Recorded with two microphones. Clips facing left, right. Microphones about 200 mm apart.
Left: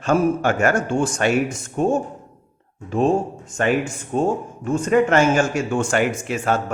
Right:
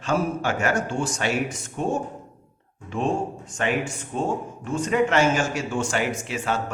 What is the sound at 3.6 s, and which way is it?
Speech, 45° left (ahead or behind).